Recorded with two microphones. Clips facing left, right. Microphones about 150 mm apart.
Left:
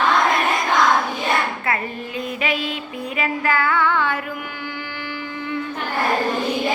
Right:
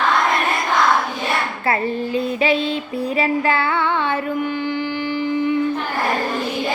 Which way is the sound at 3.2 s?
25° right (ahead or behind).